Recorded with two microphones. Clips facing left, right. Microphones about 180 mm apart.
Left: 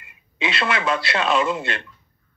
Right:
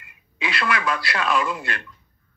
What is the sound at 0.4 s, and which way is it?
A man's voice, 25° left (ahead or behind).